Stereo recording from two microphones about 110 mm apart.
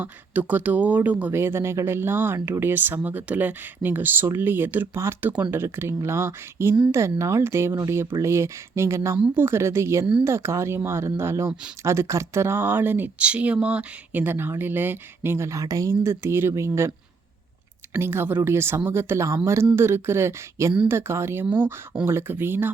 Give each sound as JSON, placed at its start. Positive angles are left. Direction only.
{"t": 0.0, "sound": "speech", "side_deg": -15}
{"t": 17.9, "sound": "speech", "side_deg": -20}